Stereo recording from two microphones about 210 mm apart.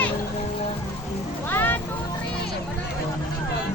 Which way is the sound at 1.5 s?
10° left (ahead or behind).